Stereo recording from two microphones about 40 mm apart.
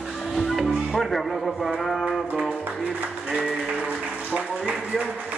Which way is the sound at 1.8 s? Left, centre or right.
Centre.